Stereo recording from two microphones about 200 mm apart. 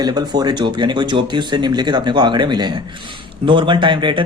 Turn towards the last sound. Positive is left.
turn(degrees=-25)  # may be behind; listen again after turning